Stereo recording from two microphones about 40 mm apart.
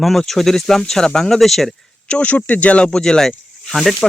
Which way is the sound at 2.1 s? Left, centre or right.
Left.